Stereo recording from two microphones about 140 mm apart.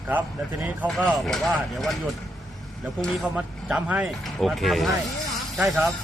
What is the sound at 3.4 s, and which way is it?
Speech, 10° right (ahead or behind).